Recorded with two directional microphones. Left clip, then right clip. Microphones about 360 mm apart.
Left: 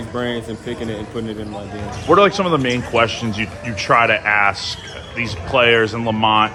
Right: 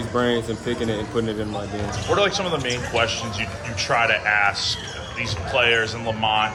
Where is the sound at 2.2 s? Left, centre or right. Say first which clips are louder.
Left 7 dB; left.